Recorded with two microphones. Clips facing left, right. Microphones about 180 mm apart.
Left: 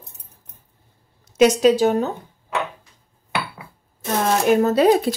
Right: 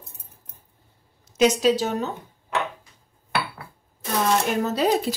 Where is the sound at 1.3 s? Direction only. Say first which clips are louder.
Left 4 dB; 60° left (ahead or behind).